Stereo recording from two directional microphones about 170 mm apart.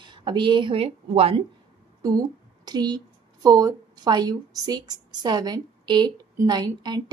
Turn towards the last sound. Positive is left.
turn(degrees=-25)  # may be behind; listen again after turning